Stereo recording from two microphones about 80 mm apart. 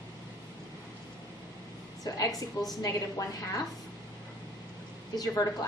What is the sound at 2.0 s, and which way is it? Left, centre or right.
Speech, left.